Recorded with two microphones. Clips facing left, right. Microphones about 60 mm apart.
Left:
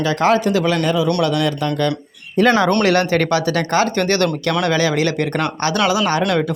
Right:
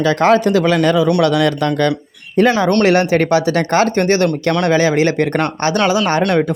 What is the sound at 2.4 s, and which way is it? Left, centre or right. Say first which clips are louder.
Speech: right 2 dB; right.